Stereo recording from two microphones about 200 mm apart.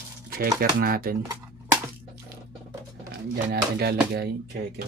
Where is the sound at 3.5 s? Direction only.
55° right (ahead or behind).